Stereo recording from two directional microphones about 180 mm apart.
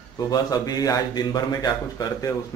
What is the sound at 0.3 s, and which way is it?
A man's voice, 20° left (ahead or behind).